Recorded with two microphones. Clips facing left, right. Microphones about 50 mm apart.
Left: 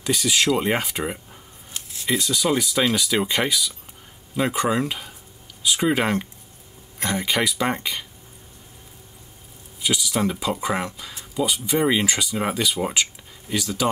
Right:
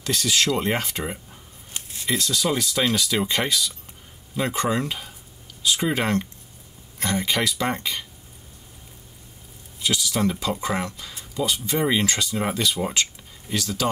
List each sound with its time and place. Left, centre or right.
0.0 s speech: centre
9.8 s speech: centre